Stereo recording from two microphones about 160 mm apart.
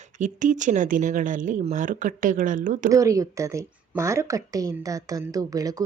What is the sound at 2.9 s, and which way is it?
Speech, 20° right (ahead or behind).